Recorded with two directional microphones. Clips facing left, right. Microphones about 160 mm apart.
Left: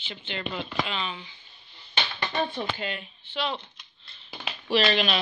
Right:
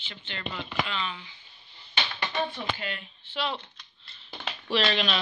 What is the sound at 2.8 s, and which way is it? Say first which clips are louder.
Speech: left 3 dB; 20° left (ahead or behind).